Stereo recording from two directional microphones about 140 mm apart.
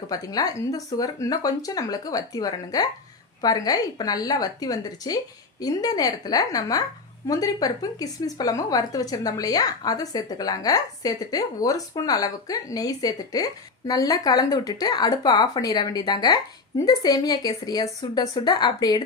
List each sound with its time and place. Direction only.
0.1 s speech: 25° left (ahead or behind)